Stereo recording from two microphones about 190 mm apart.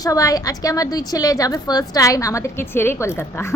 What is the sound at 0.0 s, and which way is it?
A woman's voice, 20° left (ahead or behind).